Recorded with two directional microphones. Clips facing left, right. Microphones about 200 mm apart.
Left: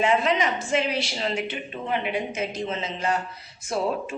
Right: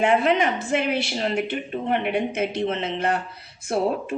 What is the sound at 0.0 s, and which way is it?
A woman's voice, 55° right (ahead or behind).